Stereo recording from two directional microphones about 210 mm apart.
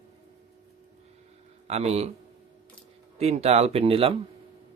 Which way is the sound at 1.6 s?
30° right (ahead or behind).